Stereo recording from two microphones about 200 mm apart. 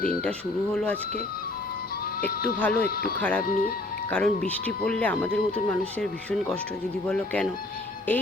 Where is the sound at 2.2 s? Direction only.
5° left (ahead or behind).